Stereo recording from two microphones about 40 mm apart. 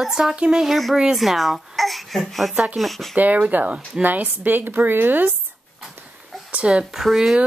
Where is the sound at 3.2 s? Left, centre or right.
Right.